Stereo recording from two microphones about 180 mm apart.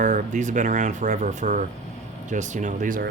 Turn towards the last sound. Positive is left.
turn(degrees=-45)  # may be behind; listen again after turning